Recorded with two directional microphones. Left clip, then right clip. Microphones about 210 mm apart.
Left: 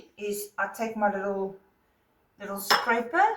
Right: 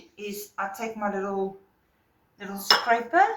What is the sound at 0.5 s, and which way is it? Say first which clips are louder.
Speech: right 2 dB; 5° right (ahead or behind).